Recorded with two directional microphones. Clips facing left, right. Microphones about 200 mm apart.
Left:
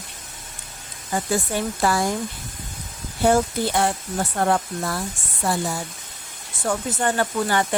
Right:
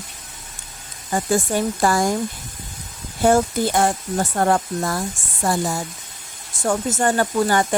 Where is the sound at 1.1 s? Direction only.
50° right (ahead or behind).